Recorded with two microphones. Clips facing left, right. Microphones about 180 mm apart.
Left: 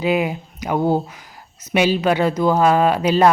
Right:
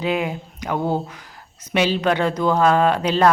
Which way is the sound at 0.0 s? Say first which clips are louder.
Left 3 dB; 10° left (ahead or behind).